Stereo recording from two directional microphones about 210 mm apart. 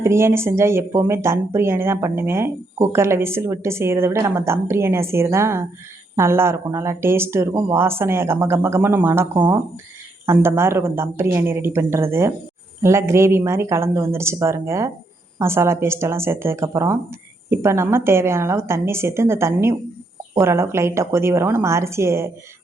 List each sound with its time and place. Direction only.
0.0 s speech: 10° right (ahead or behind)
10.2 s speech: 10° right (ahead or behind)